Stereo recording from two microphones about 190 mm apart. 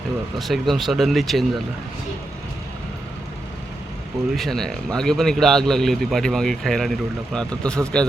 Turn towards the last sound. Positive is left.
turn(degrees=5)  # may be behind; listen again after turning